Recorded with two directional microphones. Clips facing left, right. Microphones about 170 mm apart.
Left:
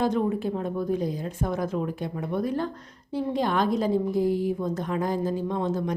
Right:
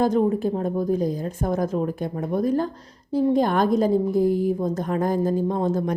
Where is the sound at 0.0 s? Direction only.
40° right (ahead or behind).